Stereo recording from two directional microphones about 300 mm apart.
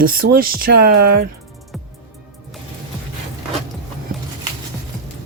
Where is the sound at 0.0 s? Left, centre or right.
Right.